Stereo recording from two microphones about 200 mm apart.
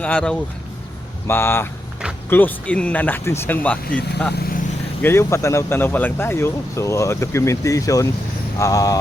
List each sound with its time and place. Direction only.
0.0 s speech: 5° left (ahead or behind)
4.4 s vehicle: 50° left (ahead or behind)
5.0 s speech: 15° left (ahead or behind)